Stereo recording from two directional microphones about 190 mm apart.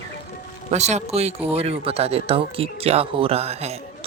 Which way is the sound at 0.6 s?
35° right (ahead or behind).